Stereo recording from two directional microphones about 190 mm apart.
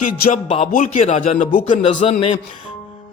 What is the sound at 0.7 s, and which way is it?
Speech, 40° left (ahead or behind).